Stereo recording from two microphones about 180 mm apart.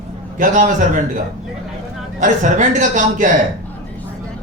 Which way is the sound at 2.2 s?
45° right (ahead or behind).